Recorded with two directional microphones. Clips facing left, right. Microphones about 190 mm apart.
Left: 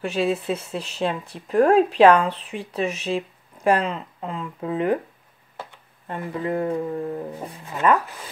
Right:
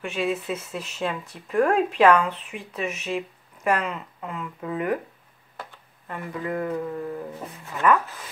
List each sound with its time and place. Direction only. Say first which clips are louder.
0.0 s speech: left 4 dB; 35° left (ahead or behind)
7.6 s speech: left 1 dB; 15° left (ahead or behind)